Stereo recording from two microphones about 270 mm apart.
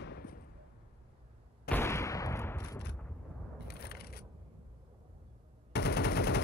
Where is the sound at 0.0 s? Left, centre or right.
Left.